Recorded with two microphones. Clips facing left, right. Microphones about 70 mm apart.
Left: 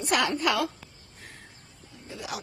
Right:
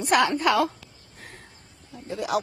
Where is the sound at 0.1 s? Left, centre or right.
Right.